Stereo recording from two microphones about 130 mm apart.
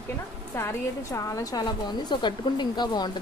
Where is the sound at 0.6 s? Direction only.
20° left (ahead or behind).